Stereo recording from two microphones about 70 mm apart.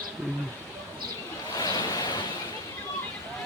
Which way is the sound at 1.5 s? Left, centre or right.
Left.